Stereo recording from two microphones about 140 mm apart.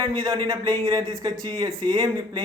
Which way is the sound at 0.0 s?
30° right (ahead or behind).